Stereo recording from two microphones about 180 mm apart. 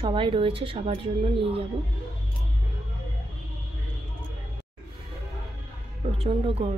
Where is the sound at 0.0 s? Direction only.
30° right (ahead or behind).